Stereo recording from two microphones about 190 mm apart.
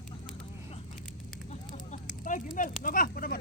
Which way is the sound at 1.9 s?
45° left (ahead or behind).